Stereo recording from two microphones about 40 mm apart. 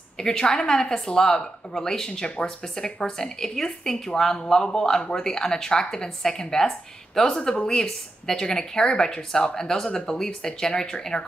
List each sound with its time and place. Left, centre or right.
0.2 s speech: centre